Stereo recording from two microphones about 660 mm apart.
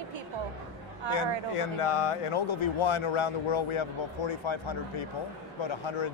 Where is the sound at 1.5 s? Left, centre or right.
Left.